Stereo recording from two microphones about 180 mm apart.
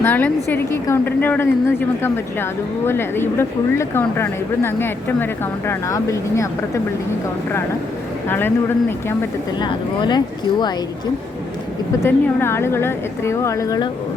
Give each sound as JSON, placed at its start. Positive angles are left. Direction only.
{"t": 0.0, "sound": "a woman's voice", "side_deg": 10}
{"t": 8.3, "sound": "a woman's voice", "side_deg": 10}
{"t": 9.6, "sound": "speech", "side_deg": 25}
{"t": 12.0, "sound": "a woman's voice", "side_deg": 15}